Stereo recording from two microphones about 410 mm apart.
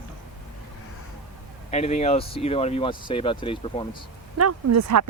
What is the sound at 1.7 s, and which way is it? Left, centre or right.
Speech, centre.